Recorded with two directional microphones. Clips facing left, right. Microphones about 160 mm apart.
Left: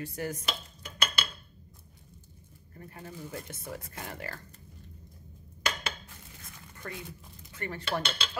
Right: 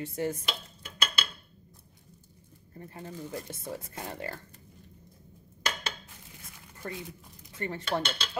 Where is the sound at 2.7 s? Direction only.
25° right (ahead or behind).